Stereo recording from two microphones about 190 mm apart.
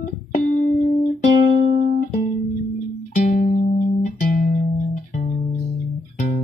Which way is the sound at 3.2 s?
45° left (ahead or behind).